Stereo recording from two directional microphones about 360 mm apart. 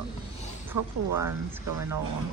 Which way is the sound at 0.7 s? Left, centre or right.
Right.